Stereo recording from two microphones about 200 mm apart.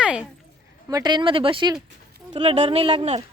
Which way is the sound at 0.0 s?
5° right (ahead or behind).